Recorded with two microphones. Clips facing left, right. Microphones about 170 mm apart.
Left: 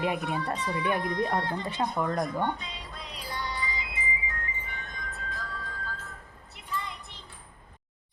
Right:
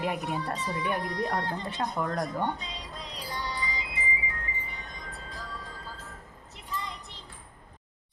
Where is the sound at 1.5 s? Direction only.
Centre (ahead or behind).